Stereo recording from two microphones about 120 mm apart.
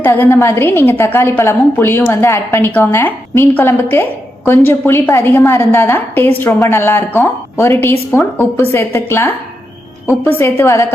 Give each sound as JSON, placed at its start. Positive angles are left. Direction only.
{"t": 0.0, "sound": "a woman's voice", "side_deg": 15}